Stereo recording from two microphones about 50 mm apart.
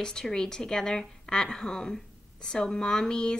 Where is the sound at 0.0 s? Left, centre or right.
Centre.